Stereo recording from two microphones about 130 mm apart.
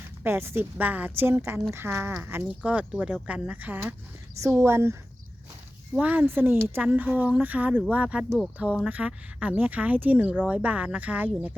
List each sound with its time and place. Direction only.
0.2 s speech: 20° right (ahead or behind)